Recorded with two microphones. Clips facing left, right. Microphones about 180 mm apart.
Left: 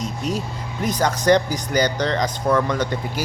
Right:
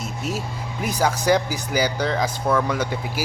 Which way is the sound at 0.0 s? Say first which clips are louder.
Left 3 dB; 5° right (ahead or behind).